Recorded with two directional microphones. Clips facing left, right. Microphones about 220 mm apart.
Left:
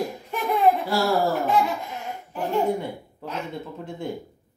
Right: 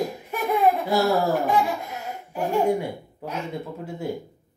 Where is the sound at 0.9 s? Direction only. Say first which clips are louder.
Right 1 dB; 20° right (ahead or behind).